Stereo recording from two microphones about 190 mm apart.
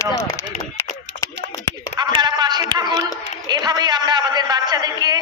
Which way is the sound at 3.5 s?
20° right (ahead or behind).